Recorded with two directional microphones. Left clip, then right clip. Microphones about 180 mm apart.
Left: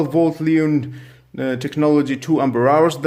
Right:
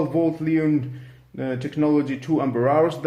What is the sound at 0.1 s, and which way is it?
Speech, 60° left (ahead or behind).